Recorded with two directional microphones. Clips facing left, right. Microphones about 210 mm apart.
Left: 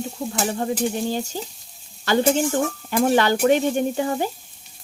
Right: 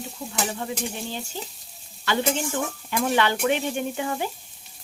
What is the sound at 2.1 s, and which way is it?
Frying, 40° left (ahead or behind).